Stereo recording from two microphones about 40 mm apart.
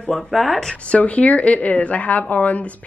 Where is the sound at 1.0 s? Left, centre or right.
Left.